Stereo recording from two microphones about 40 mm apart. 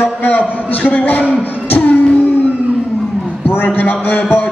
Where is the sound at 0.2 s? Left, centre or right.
Left.